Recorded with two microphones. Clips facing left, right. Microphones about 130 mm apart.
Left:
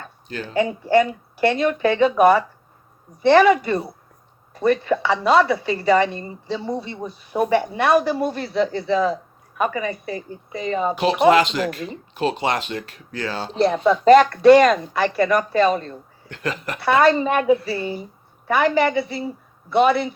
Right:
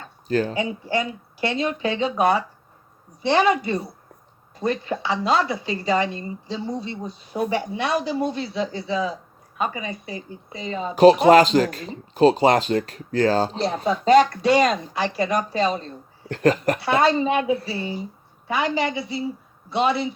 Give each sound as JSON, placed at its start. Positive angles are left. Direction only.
{"t": 0.3, "sound": "speech", "side_deg": -40}
{"t": 0.5, "sound": "speech", "side_deg": 55}
{"t": 10.9, "sound": "speech", "side_deg": -40}
{"t": 13.6, "sound": "speech", "side_deg": 55}
{"t": 16.3, "sound": "speech", "side_deg": -40}
{"t": 16.8, "sound": "speech", "side_deg": 55}